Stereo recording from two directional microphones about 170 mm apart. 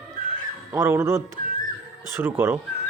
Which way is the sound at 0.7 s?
15° right (ahead or behind).